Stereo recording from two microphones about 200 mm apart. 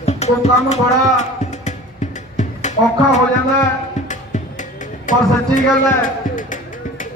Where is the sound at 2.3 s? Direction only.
35° left (ahead or behind).